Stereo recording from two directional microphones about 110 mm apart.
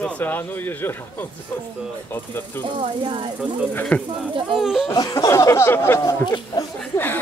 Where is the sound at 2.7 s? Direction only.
55° right (ahead or behind).